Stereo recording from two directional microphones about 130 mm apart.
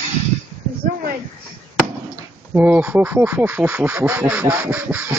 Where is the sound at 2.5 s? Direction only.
15° right (ahead or behind).